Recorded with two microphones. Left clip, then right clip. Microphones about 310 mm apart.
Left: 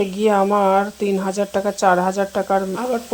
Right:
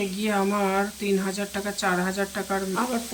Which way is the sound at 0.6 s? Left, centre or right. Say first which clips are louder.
Left 8 dB; left.